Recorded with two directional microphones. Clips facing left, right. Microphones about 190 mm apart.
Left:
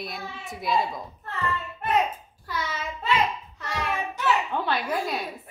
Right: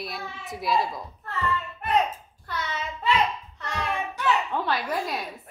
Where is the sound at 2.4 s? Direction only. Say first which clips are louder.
Left 1 dB; 10° left (ahead or behind).